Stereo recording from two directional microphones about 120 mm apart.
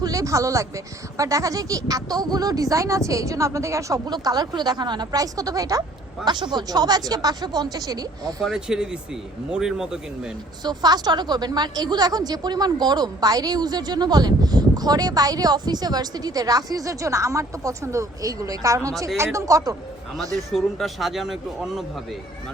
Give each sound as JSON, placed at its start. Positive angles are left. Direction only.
{"t": 0.0, "sound": "a woman's voice", "side_deg": -30}
{"t": 6.2, "sound": "a woman's voice", "side_deg": -40}
{"t": 8.4, "sound": "speech", "side_deg": 0}
{"t": 10.6, "sound": "a woman's voice", "side_deg": -35}
{"t": 20.5, "sound": "speech", "side_deg": 0}